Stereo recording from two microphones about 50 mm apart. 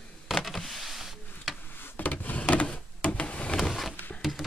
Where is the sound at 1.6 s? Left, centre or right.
Left.